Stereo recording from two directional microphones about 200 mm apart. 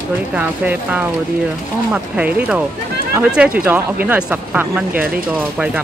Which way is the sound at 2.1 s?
5° right (ahead or behind).